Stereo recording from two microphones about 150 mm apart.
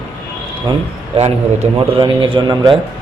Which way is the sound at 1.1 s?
40° right (ahead or behind).